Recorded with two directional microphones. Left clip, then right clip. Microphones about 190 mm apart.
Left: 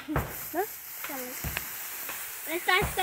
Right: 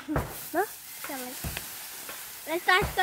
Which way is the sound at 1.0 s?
50° left (ahead or behind).